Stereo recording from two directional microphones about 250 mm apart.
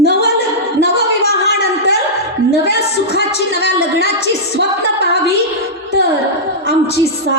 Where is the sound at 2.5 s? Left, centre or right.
Left.